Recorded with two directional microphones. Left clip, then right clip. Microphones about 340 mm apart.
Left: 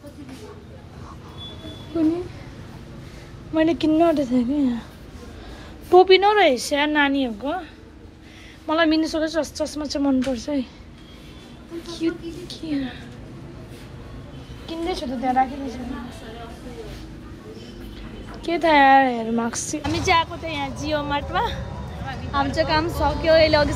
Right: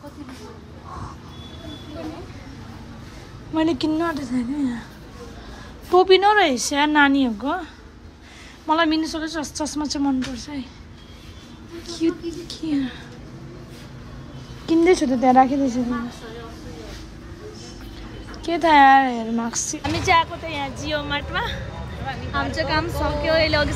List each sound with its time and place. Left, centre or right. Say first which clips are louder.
3.5 s speech: left 3 dB; centre
5.9 s speech: left 1 dB; centre
12.0 s speech: right 3 dB; centre
12.4 s a sound: right 3 dB; centre
14.9 s speech: right 5 dB; centre
18.3 s speech: right 2 dB; centre
19.8 s speech: right 1 dB; centre